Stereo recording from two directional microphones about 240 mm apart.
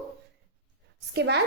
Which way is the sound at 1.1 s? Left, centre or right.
Right.